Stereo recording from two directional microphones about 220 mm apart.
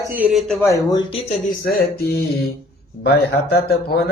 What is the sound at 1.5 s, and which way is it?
A man's voice, 45° left (ahead or behind).